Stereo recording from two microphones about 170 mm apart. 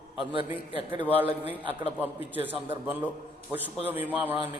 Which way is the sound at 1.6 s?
10° right (ahead or behind).